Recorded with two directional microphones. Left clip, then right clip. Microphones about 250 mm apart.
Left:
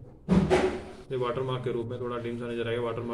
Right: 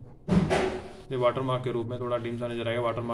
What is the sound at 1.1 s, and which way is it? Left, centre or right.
A man's voice, right.